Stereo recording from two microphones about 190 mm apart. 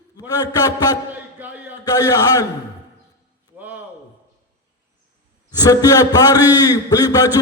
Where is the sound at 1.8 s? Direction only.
20° left (ahead or behind).